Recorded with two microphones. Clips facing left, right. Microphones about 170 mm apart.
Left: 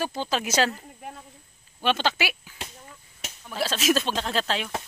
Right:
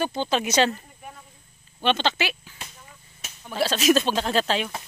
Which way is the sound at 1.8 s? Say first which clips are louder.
Right 1 dB; 5° left (ahead or behind).